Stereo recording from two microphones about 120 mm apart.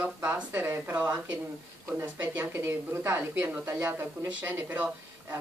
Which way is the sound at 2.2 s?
15° right (ahead or behind).